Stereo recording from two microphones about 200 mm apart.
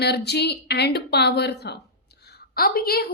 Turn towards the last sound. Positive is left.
turn(degrees=50)  # may be behind; listen again after turning